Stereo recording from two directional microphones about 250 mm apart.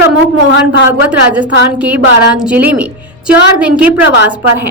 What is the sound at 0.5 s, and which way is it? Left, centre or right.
Speech, left.